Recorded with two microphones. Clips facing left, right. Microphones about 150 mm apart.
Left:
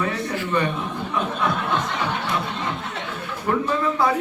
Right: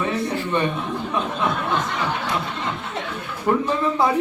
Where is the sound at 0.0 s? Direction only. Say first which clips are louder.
Right 2 dB; 25° right (ahead or behind).